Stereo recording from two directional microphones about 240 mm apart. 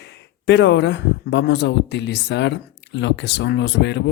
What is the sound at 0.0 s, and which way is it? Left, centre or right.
Speech, left.